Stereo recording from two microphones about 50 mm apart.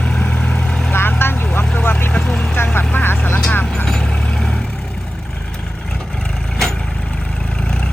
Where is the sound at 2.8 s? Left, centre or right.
Left.